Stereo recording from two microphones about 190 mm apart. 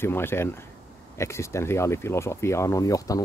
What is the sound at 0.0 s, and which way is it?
Speech, 10° left (ahead or behind).